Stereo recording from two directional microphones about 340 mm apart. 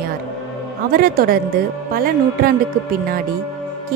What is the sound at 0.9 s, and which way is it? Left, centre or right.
A woman's voice, right.